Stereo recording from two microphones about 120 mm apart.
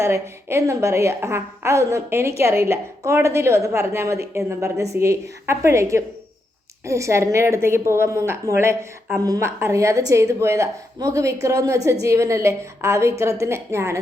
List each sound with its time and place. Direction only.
0.0 s a woman's voice: 25° right (ahead or behind)